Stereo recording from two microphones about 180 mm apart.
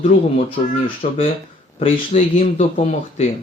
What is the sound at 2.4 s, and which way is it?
Speech, 40° left (ahead or behind).